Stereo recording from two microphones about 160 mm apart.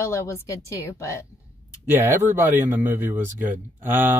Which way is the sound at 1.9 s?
15° right (ahead or behind).